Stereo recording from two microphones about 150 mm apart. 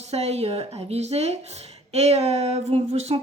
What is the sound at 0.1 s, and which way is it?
Speech, 45° right (ahead or behind).